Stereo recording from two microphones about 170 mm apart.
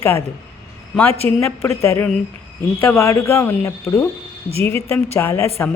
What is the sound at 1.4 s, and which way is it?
Speech, 15° left (ahead or behind).